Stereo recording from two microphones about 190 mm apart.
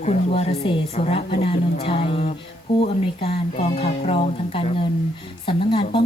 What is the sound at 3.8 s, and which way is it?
Speech, 35° left (ahead or behind).